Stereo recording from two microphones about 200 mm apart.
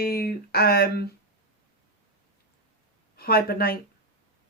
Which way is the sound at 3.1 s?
50° left (ahead or behind).